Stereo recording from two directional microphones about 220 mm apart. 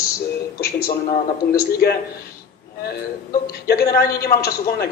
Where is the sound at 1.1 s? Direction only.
45° left (ahead or behind).